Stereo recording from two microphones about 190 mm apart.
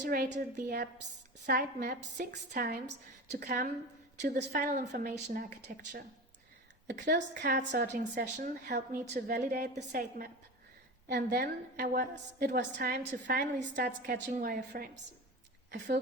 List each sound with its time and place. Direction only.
0.0 s a woman's voice: 45° right (ahead or behind)
6.8 s a woman's voice: 60° right (ahead or behind)
7.5 s a woman's voice: 40° right (ahead or behind)